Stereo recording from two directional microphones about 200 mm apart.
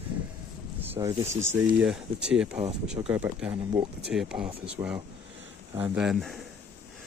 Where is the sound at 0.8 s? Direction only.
10° right (ahead or behind).